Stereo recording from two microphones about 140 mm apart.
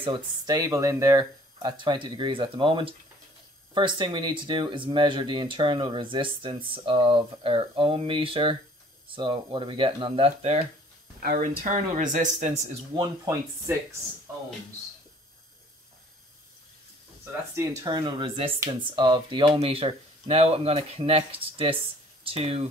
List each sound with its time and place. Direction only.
0.0 s speech: 30° right (ahead or behind); by 10.6 s 45° right (ahead or behind)
11.1 s speech: 85° right; by 12.5 s 60° right (ahead or behind)
13.2 s speech: 25° right (ahead or behind)
17.8 s speech: 35° right (ahead or behind)